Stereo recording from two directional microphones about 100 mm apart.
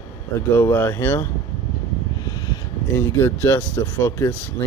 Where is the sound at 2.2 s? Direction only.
45° left (ahead or behind).